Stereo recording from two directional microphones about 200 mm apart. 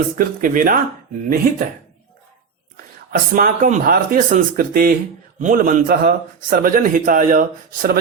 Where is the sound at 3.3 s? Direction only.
45° right (ahead or behind).